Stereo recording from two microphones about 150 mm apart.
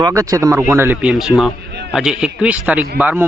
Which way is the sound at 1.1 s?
Centre (ahead or behind).